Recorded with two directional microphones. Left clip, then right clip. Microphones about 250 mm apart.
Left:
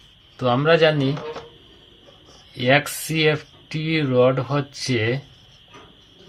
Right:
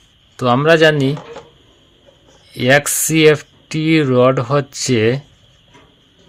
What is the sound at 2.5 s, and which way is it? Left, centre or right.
Speech, right.